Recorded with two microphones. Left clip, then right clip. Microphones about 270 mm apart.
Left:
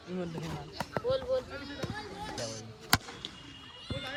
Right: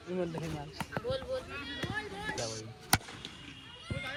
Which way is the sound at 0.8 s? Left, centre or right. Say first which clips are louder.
Left 5 dB; left.